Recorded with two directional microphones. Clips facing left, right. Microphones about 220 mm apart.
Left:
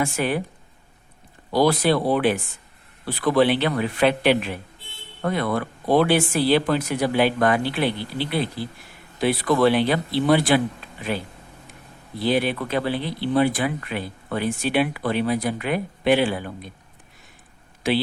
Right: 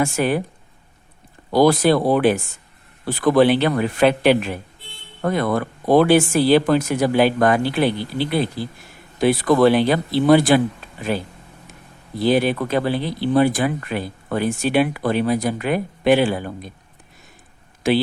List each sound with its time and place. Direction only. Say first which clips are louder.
0.0 s speech: right 4 dB; 45° right (ahead or behind)
1.5 s speech: right 4 dB; 45° right (ahead or behind)
12.2 s speech: right 4 dB; 45° right (ahead or behind)
17.8 s speech: right 4 dB; 45° right (ahead or behind)